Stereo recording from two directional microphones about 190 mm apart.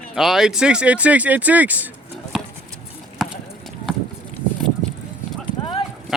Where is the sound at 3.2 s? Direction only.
Centre (ahead or behind).